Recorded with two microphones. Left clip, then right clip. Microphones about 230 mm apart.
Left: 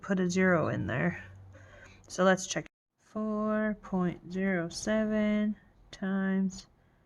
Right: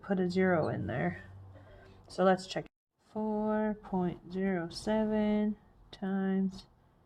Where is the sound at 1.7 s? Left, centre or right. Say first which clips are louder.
Left 2 dB; left.